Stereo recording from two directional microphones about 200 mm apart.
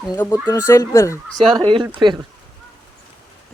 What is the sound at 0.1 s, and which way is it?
Fowl, 15° left (ahead or behind).